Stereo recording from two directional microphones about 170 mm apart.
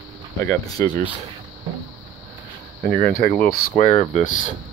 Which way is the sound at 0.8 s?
15° left (ahead or behind).